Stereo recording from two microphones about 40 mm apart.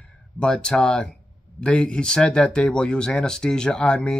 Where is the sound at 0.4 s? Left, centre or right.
Left.